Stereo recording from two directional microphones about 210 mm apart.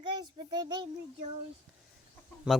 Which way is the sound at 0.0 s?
20° right (ahead or behind).